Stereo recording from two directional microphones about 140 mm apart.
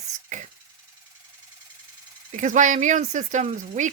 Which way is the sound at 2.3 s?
60° right (ahead or behind).